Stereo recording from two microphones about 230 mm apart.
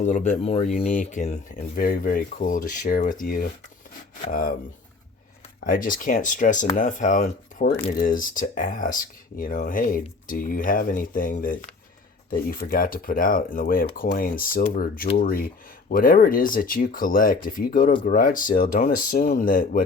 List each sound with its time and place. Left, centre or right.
0.0 s speech: left
5.6 s speech: left